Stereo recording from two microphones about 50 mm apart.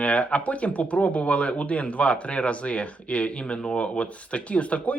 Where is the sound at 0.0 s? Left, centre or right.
Left.